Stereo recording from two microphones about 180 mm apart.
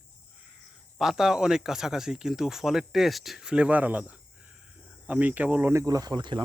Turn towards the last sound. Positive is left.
turn(degrees=-25)  # may be behind; listen again after turning